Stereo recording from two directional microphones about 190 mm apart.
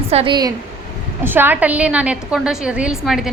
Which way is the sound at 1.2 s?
10° right (ahead or behind).